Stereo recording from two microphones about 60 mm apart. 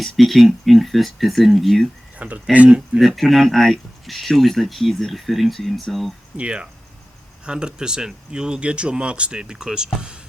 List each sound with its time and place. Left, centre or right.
0.0 s speech: centre
2.1 s speech: right
3.0 s speech: centre
6.3 s speech: centre